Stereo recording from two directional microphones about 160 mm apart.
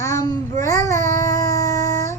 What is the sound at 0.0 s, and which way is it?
Babbling, 20° left (ahead or behind).